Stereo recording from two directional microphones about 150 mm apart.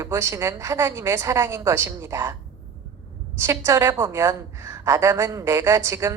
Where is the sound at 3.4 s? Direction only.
20° right (ahead or behind).